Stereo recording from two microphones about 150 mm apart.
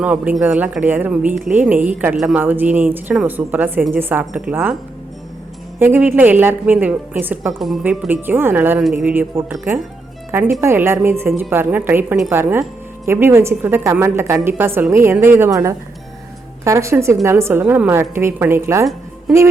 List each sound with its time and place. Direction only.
0.0 s a woman's voice: 10° right (ahead or behind)
5.8 s a woman's voice: 15° right (ahead or behind)
7.6 s a woman's voice: centre (ahead or behind)
7.9 s a woman's voice: 10° right (ahead or behind)
19.3 s a woman's voice: centre (ahead or behind)